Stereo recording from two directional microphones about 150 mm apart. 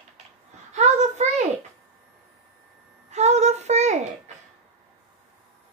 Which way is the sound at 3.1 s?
50° right (ahead or behind).